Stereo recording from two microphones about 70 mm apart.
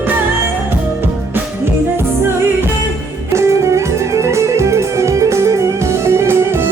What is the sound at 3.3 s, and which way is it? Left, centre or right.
Music, right.